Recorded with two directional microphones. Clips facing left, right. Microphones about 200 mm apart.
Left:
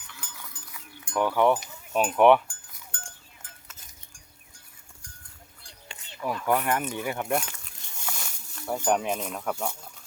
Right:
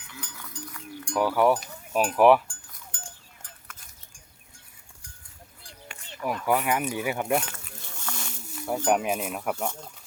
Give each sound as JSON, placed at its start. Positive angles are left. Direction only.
{"t": 0.2, "sound": "goat", "side_deg": 5}
{"t": 1.9, "sound": "sheep", "side_deg": -5}
{"t": 3.7, "sound": "a sound", "side_deg": 20}
{"t": 6.2, "sound": "speech", "side_deg": -5}
{"t": 8.1, "sound": "snake", "side_deg": 10}
{"t": 8.6, "sound": "speech", "side_deg": 0}